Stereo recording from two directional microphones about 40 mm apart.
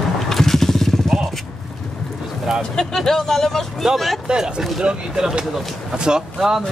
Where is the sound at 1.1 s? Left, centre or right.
Centre.